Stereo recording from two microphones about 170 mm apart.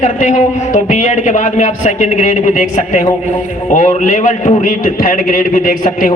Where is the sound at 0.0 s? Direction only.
45° left (ahead or behind).